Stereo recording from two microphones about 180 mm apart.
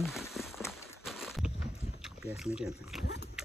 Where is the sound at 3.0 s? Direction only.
70° left (ahead or behind).